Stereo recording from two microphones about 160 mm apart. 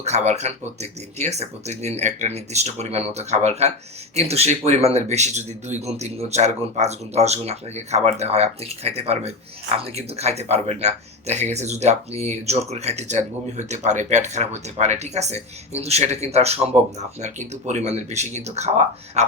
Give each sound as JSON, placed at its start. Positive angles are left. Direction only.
{"t": 0.0, "sound": "speech", "side_deg": -45}